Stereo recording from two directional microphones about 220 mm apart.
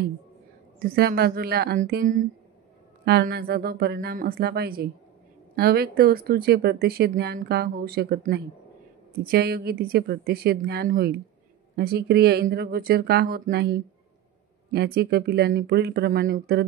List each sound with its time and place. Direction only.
0.8 s speech: 45° right (ahead or behind)